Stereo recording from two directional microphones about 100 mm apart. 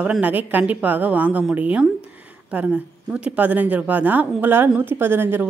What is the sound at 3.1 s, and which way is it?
Speech, 15° right (ahead or behind).